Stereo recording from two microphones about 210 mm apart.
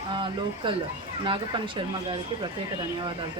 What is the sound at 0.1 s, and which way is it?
Speech, 25° right (ahead or behind).